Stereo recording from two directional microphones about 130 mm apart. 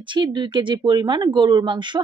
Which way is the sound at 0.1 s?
35° right (ahead or behind).